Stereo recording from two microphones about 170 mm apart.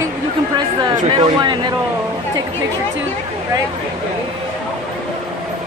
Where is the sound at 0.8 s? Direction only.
25° right (ahead or behind).